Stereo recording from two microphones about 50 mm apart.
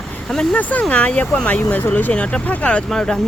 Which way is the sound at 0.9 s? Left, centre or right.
Left.